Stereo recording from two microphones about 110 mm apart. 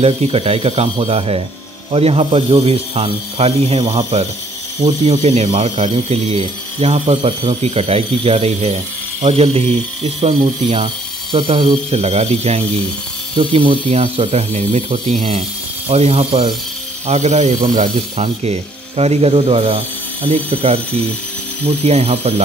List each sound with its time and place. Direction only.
0.0 s speech: 65° right (ahead or behind)
4.8 s speech: 85° right; by 10.9 s 65° right (ahead or behind)
11.3 s speech: 55° right (ahead or behind)
11.9 s speech: 75° right (ahead or behind)
13.5 s speech: 60° right (ahead or behind)
17.1 s speech: 90° right
18.1 s speech: 70° right (ahead or behind)
21.8 s speech: 75° right (ahead or behind)